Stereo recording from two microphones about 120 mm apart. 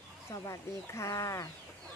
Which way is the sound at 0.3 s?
25° left (ahead or behind).